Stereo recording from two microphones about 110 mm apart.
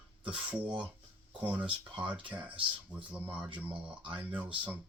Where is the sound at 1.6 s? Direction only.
50° right (ahead or behind).